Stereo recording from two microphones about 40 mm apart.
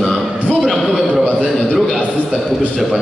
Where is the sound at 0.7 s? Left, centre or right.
Centre.